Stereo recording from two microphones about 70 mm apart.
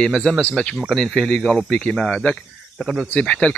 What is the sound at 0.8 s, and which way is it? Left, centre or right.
Speech, centre.